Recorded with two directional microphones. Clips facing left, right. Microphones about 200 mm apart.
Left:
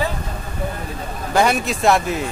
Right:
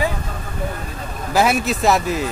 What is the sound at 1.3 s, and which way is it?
Speech, 5° right (ahead or behind).